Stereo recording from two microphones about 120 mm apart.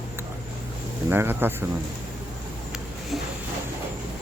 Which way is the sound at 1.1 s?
20° right (ahead or behind).